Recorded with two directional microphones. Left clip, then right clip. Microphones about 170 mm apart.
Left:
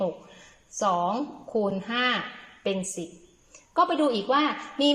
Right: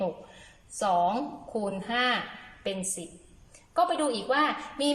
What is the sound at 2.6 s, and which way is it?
A woman's voice, 10° left (ahead or behind).